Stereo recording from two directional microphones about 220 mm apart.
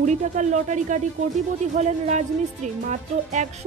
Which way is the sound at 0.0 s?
30° right (ahead or behind).